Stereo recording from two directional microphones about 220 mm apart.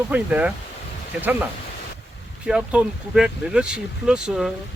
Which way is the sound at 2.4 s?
5° right (ahead or behind).